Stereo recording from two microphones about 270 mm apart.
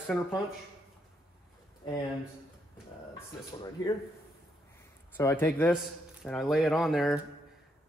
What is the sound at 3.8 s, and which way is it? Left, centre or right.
Speech, centre.